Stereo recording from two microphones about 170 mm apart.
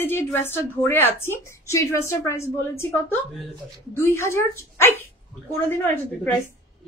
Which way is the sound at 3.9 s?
15° left (ahead or behind).